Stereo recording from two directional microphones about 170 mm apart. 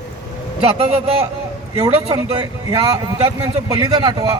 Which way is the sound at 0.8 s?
35° right (ahead or behind).